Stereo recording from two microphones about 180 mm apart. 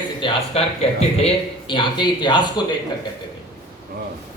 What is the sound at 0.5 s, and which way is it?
A man's voice, 35° left (ahead or behind).